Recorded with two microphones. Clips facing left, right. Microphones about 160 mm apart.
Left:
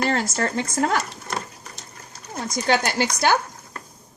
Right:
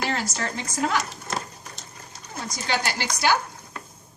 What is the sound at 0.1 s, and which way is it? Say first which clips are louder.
Speech: left 5 dB; 50° left (ahead or behind).